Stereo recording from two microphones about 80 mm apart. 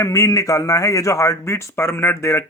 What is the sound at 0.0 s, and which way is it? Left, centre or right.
Speech, left.